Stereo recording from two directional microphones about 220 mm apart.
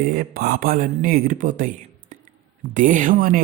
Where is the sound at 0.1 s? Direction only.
40° right (ahead or behind).